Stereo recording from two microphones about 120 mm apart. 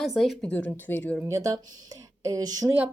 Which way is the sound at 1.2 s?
25° right (ahead or behind).